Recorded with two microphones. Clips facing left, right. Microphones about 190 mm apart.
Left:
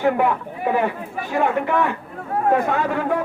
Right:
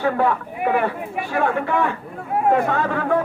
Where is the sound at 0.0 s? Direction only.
15° left (ahead or behind).